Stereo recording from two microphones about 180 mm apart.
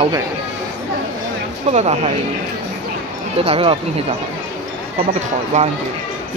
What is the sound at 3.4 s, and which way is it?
Speech, 35° right (ahead or behind).